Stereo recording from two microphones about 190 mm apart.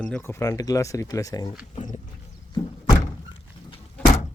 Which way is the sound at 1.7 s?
40° left (ahead or behind).